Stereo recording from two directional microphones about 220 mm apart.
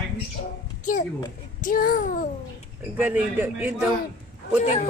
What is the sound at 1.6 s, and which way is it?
Speech, 40° left (ahead or behind).